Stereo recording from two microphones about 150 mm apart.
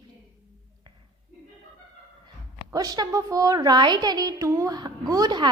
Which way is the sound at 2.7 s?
25° right (ahead or behind).